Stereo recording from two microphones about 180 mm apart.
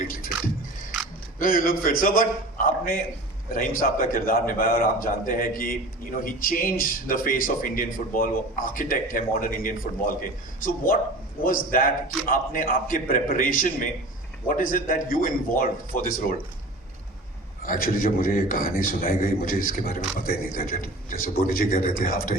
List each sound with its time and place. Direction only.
0.0 s music: 50° left (ahead or behind)
1.4 s a man's voice: 50° left (ahead or behind)
11.4 s a man's voice: 50° left (ahead or behind)
17.6 s a man's voice: 50° left (ahead or behind)